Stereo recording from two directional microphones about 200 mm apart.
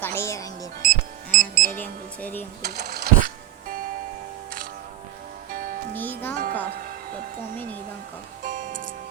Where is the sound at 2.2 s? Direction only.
10° left (ahead or behind).